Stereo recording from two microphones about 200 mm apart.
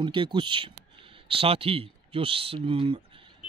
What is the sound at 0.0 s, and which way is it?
Speech, 25° right (ahead or behind).